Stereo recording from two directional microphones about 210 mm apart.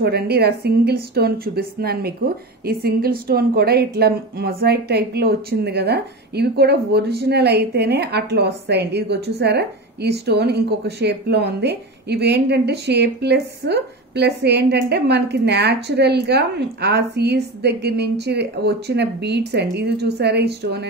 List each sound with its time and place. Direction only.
0.0 s speech: 50° right (ahead or behind)